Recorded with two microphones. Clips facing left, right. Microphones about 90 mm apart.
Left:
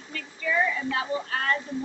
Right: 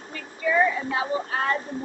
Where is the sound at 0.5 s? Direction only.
35° right (ahead or behind).